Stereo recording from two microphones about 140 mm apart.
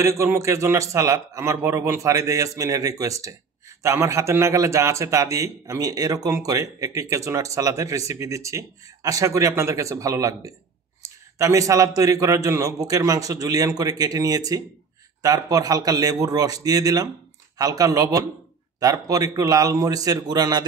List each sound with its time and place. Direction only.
0.0 s a man's voice: 20° right (ahead or behind)